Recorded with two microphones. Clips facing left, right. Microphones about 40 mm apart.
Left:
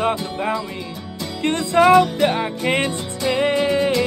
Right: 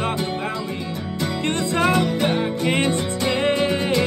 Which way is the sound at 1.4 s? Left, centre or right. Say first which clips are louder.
Left 6 dB; left.